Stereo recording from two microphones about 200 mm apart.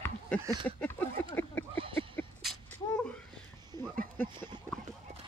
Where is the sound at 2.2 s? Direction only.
10° left (ahead or behind).